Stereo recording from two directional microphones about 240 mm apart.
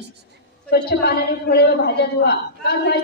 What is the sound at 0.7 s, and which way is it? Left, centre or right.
A woman's voice, left.